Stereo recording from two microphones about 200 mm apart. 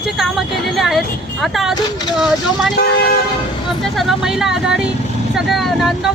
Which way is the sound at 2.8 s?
55° left (ahead or behind).